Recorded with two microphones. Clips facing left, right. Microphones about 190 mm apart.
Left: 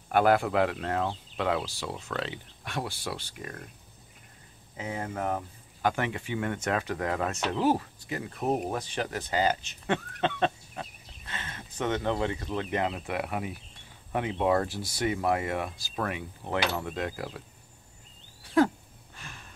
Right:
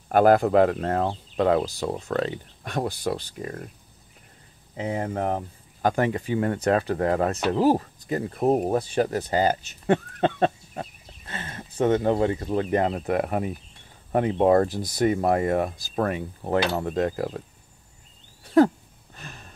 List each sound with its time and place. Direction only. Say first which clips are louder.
0.1 s speech: right 6 dB; 40° right (ahead or behind)
3.3 s speech: right 7 dB; 30° right (ahead or behind)
4.7 s speech: right 6 dB; 35° right (ahead or behind)
19.1 s a sound: right 4 dB; 40° right (ahead or behind)